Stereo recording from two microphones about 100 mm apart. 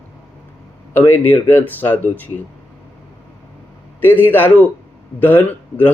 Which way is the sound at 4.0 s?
20° left (ahead or behind).